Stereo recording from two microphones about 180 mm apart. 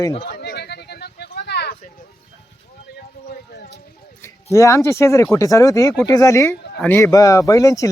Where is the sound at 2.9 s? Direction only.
60° left (ahead or behind).